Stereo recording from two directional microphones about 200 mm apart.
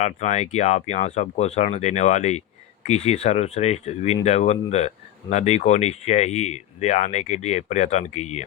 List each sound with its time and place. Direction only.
0.0 s speech: 35° left (ahead or behind)